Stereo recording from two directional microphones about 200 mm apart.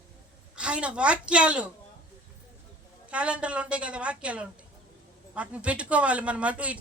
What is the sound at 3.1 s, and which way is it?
A woman's voice, 5° right (ahead or behind).